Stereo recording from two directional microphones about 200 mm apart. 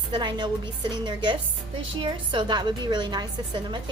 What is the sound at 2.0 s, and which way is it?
A woman's voice, 25° right (ahead or behind).